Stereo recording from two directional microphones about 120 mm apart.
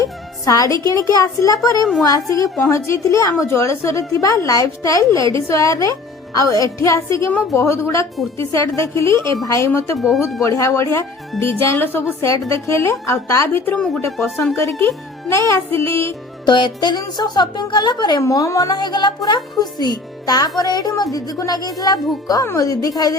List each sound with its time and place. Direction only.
0.0 s a woman's voice: 30° left (ahead or behind)
10.0 s speech: centre (ahead or behind)
10.4 s a woman's voice: 25° left (ahead or behind); by 14.3 s 5° left (ahead or behind)
14.8 s a woman's voice: 20° left (ahead or behind)
16.5 s speech: 40° left (ahead or behind)
18.2 s a woman's voice: 25° left (ahead or behind)